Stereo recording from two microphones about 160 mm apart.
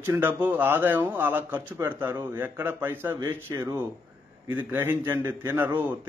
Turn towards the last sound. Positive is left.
turn(degrees=-15)  # may be behind; listen again after turning